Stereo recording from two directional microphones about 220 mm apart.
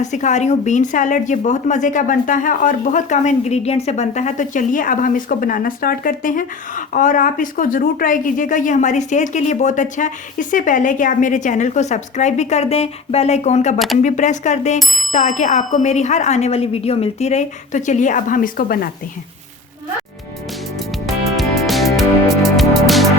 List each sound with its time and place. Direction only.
0.0 s speech: 35° left (ahead or behind)
13.7 s speech: centre (ahead or behind)
14.0 s speech: 35° left (ahead or behind)
21.1 s music: centre (ahead or behind)